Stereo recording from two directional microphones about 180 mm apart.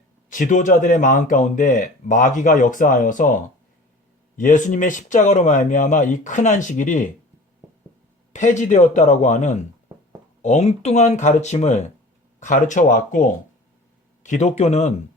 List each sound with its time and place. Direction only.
0.3 s speech: 45° left (ahead or behind)
8.3 s speech: 40° left (ahead or behind)